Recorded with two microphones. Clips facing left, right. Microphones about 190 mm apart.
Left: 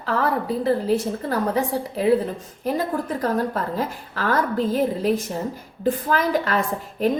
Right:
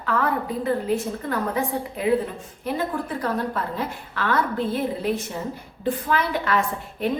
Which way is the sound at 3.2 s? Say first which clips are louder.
Left 3 dB; 40° left (ahead or behind).